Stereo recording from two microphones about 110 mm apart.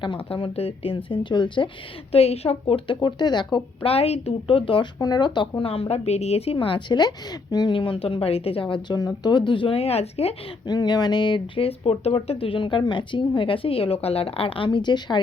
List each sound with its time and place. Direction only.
0.0 s speech: 50° left (ahead or behind)
2.1 s speech: 65° left (ahead or behind); by 3.6 s 40° left (ahead or behind)
3.8 s a woman's voice: 65° left (ahead or behind); by 4.9 s 50° left (ahead or behind)
4.9 s speech: 35° left (ahead or behind)
9.0 s speech: 35° left (ahead or behind); by 10.3 s 65° left (ahead or behind)
10.7 s speech: 40° left (ahead or behind)